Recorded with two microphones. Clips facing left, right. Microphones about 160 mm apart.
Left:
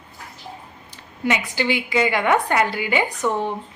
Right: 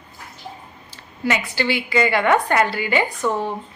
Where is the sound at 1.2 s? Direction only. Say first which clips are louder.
Even; 15° left (ahead or behind).